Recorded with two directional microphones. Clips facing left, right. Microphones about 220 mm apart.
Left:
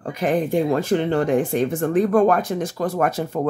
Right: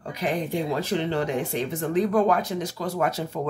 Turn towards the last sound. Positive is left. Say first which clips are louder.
# left 4 dB
turn(degrees=50)  # may be behind; listen again after turning